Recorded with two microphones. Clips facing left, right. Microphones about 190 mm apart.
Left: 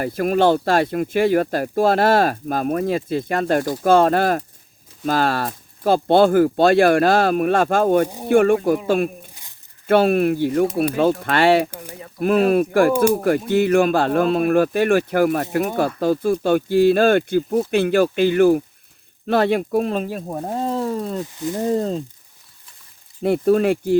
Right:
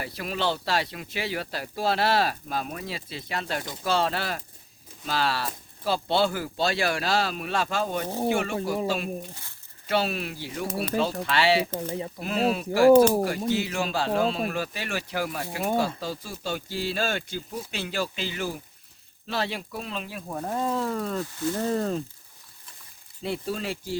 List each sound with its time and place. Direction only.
0.0 s speech: 50° left (ahead or behind)
9.3 s speech: 15° left (ahead or behind)
9.8 s speech: 55° left (ahead or behind); by 22.0 s 20° left (ahead or behind)
23.2 s speech: 55° left (ahead or behind)